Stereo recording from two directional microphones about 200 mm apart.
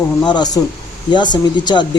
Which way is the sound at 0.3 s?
20° left (ahead or behind).